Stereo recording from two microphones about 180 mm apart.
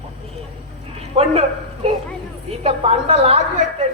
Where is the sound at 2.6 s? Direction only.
30° right (ahead or behind).